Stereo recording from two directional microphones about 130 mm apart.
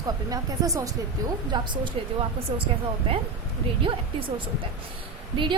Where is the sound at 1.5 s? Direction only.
35° right (ahead or behind).